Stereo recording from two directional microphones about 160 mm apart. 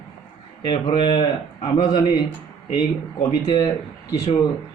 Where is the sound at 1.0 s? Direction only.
30° left (ahead or behind).